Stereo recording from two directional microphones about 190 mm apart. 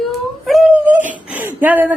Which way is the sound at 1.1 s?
10° right (ahead or behind).